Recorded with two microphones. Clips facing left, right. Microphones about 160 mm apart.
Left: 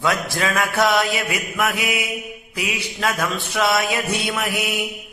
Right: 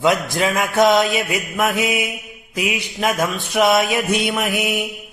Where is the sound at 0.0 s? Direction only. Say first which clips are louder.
Right 4 dB; 20° right (ahead or behind).